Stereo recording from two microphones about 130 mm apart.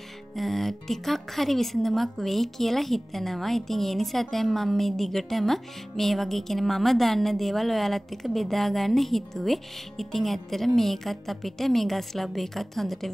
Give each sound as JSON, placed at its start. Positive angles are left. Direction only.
{"t": 0.4, "sound": "a woman's voice", "side_deg": 0}